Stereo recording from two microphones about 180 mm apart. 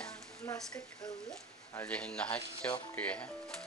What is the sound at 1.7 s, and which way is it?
Speech, 10° left (ahead or behind).